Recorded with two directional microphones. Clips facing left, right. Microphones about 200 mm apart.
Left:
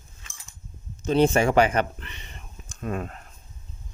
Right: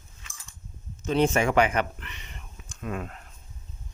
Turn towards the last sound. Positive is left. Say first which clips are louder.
# left 3 dB
turn(degrees=40)  # may be behind; listen again after turning